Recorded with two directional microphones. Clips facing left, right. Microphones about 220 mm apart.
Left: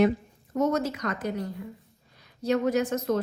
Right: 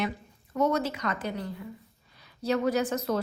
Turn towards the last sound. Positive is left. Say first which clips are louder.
# left 2 dB
turn(degrees=-35)  # may be behind; listen again after turning